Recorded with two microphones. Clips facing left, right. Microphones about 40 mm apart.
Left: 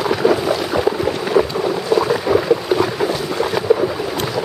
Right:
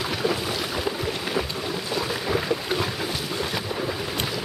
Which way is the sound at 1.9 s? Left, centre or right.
Centre.